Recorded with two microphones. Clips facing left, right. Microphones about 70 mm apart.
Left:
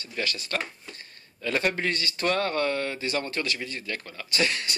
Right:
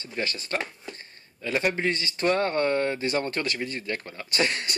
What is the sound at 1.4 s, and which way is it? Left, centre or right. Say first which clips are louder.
Speech: right 1 dB; centre.